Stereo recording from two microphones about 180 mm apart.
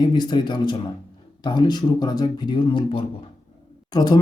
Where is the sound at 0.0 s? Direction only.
25° left (ahead or behind).